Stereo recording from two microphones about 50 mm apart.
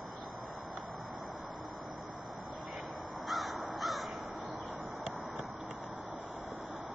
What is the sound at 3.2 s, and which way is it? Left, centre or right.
Crow, centre.